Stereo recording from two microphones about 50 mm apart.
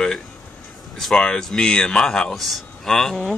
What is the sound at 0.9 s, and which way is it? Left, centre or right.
Speech, centre.